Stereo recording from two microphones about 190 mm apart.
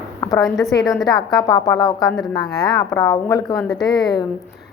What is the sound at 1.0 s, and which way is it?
Speech, 20° left (ahead or behind).